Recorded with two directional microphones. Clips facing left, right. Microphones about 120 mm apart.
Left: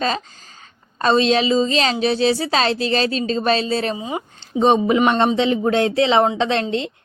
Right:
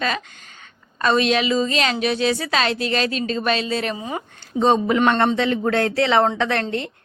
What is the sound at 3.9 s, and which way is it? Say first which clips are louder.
Speech: left 2 dB; 15° left (ahead or behind).